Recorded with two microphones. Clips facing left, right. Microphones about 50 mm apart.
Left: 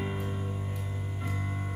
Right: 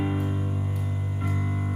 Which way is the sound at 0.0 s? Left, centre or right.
Centre.